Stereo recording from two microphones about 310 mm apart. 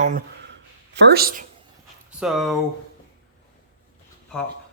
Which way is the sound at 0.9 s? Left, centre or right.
Right.